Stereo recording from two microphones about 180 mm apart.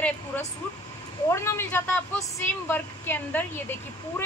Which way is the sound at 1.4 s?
15° left (ahead or behind).